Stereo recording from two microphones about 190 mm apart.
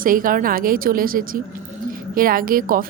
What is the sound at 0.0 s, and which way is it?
A woman's voice, 45° right (ahead or behind).